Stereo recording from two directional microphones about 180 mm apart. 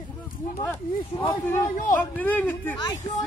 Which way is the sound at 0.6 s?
15° left (ahead or behind).